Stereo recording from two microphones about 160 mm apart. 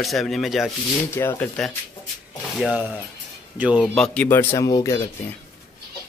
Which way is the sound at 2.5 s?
Centre (ahead or behind).